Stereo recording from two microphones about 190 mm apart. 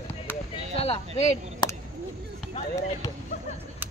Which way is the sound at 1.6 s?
20° left (ahead or behind).